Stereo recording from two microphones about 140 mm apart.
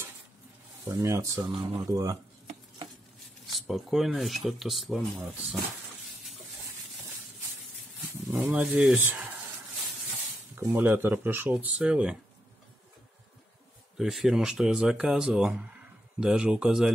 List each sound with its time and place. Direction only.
0.8 s speech: 20° right (ahead or behind)
3.4 s speech: centre (ahead or behind)
8.4 s speech: 5° right (ahead or behind)
10.5 s speech: 15° right (ahead or behind)
13.9 s speech: centre (ahead or behind)